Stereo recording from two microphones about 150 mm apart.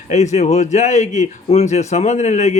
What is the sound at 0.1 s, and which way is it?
Speech, 50° left (ahead or behind).